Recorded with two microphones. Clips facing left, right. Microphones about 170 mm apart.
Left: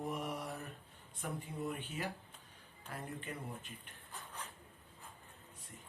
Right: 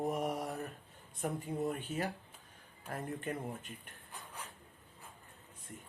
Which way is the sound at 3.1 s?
45° right (ahead or behind).